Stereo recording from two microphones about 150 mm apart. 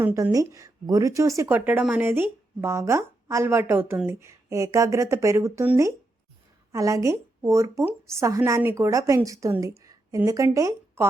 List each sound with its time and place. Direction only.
0.0 s speech: 20° right (ahead or behind)
9.8 s a sound: 25° right (ahead or behind)
10.2 s speech: 20° right (ahead or behind)